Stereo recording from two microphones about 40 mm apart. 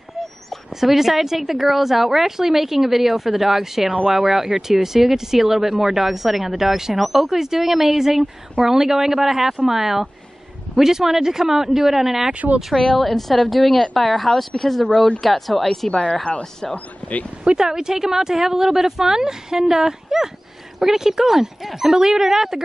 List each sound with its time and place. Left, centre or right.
0.7 s speech: centre
12.7 s speech: centre
15.9 s speech: left
17.6 s speech: centre
21.9 s speech: centre